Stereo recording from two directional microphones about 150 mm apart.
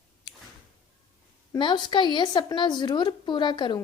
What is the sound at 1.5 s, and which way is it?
A woman's voice, 30° left (ahead or behind).